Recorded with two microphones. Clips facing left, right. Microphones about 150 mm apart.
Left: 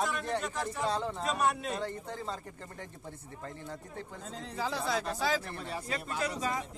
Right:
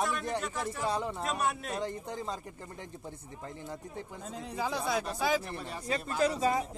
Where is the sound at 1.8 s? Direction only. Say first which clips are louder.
Right 1 dB; 15° right (ahead or behind).